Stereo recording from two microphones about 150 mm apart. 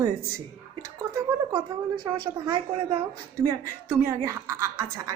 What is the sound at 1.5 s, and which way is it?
A woman's voice, 25° right (ahead or behind).